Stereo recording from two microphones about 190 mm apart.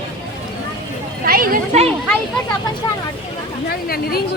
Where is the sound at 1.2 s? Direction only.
50° right (ahead or behind).